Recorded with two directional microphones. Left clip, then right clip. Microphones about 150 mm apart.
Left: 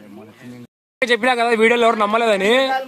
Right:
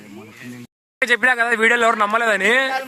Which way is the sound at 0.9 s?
5° left (ahead or behind).